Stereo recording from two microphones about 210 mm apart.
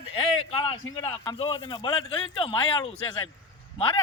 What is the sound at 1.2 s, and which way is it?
Speech, 20° left (ahead or behind).